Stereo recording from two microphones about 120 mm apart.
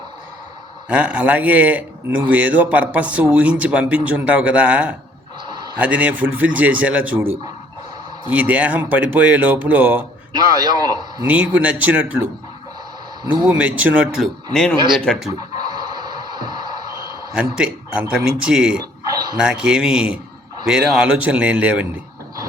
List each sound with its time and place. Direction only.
0.9 s speech: 10° right (ahead or behind)
5.5 s a sound: 40° right (ahead or behind)
5.8 s speech: 10° right (ahead or behind)
8.3 s speech: 15° right (ahead or behind)
10.3 s a man's voice: 35° right (ahead or behind)
11.3 s speech: 10° right (ahead or behind)
13.5 s speech: 10° right (ahead or behind)
14.2 s speech: 5° left (ahead or behind)
14.8 s a man's voice: 40° right (ahead or behind)
15.0 s speech: 5° left (ahead or behind)
15.5 s a sound: 35° right (ahead or behind)
17.3 s a man's voice: 10° right (ahead or behind)
18.8 s dog: 35° right (ahead or behind)
19.4 s speech: 5° right (ahead or behind)